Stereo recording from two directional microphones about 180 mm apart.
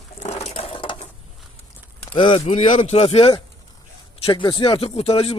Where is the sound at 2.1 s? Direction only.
30° left (ahead or behind).